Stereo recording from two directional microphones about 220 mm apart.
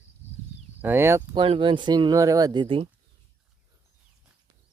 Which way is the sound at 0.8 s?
10° right (ahead or behind).